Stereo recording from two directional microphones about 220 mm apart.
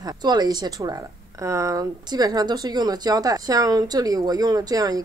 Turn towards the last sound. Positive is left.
turn(degrees=-15)  # may be behind; listen again after turning